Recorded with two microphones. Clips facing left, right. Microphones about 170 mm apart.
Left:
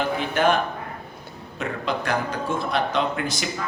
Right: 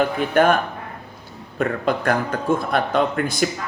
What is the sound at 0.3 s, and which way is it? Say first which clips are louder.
A man's voice: right 5 dB; 50° right (ahead or behind).